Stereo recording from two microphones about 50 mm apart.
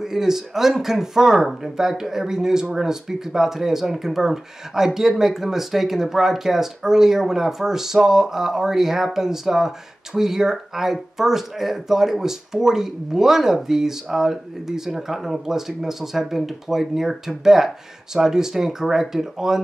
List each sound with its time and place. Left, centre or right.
0.0 s speech: centre